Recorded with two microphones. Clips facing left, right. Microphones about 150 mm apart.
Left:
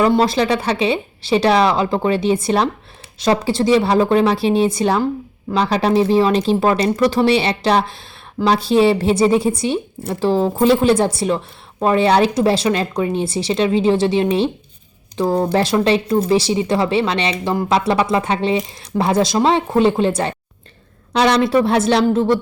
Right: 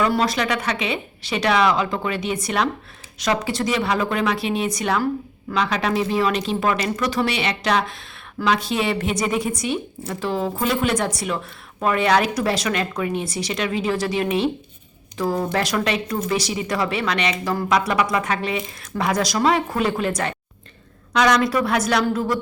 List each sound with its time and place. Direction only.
0.0 s speech: 30° left (ahead or behind)